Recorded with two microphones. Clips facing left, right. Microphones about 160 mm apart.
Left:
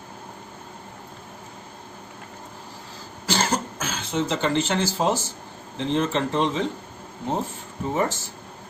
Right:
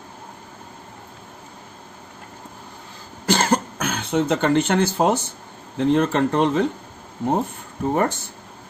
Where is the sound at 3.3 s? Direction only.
55° right (ahead or behind).